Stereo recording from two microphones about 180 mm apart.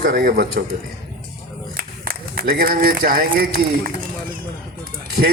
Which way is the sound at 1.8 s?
55° right (ahead or behind).